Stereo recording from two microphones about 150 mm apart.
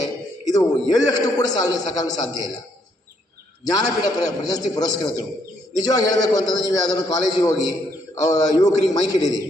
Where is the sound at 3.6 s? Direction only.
25° left (ahead or behind).